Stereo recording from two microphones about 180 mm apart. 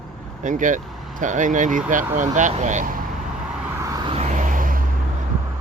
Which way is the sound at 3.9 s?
30° right (ahead or behind).